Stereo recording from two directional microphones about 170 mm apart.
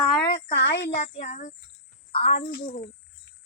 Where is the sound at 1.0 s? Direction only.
45° left (ahead or behind).